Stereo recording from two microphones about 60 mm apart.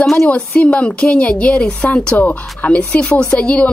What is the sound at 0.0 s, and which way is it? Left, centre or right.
Speech, centre.